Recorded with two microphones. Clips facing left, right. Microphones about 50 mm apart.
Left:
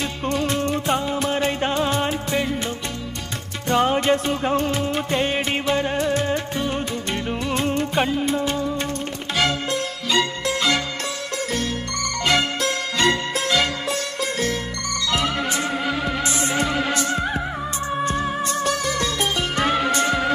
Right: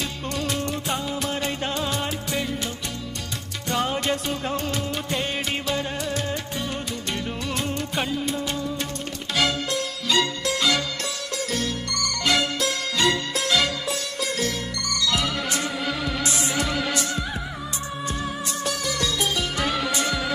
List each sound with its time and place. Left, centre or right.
0.2 s music: left
12.4 s music: left
13.4 s music: centre
15.0 s music: left
16.9 s music: left
18.5 s music: left
18.9 s music: left